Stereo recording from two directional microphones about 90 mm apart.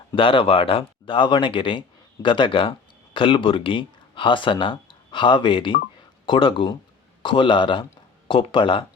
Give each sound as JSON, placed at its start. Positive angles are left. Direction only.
{"t": 0.2, "sound": "speech", "side_deg": 75}